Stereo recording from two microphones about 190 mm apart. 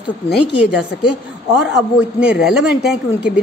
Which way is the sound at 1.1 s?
5° right (ahead or behind).